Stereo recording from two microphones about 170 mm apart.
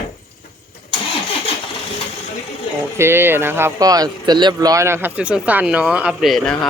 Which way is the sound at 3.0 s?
15° right (ahead or behind).